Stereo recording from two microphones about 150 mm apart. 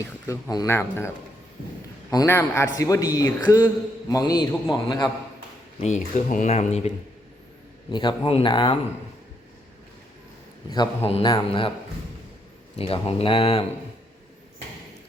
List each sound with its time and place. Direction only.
0.0 s a man's voice: 20° left (ahead or behind)
5.8 s speech: 50° left (ahead or behind)
7.9 s speech: 30° left (ahead or behind)
11.0 s speech: 40° left (ahead or behind)
12.7 s speech: 40° left (ahead or behind)